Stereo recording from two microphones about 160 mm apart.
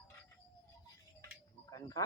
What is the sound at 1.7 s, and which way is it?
Speech, 20° left (ahead or behind).